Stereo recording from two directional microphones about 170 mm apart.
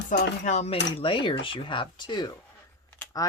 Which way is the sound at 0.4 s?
40° left (ahead or behind).